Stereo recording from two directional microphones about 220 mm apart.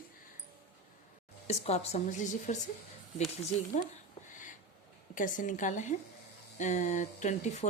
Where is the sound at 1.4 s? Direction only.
30° left (ahead or behind).